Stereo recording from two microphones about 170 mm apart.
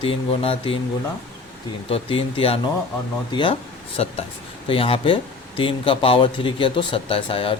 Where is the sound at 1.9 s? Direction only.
35° left (ahead or behind).